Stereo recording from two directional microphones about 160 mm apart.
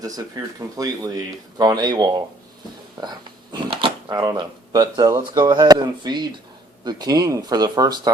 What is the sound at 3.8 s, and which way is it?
Speech, 30° right (ahead or behind).